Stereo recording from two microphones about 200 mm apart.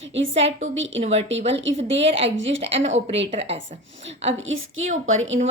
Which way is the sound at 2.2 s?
70° right (ahead or behind).